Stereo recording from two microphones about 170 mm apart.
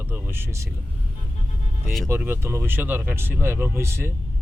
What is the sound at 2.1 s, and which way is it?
Speech, 15° right (ahead or behind).